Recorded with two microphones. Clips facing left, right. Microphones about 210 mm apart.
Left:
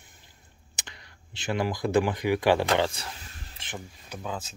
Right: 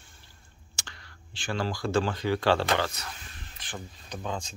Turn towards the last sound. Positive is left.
turn(degrees=5)  # may be behind; listen again after turning